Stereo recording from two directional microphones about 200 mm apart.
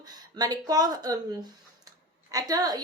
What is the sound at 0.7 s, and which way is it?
A woman's voice, 20° right (ahead or behind).